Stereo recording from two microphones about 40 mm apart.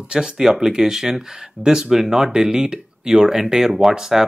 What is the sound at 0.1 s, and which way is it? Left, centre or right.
Speech, centre.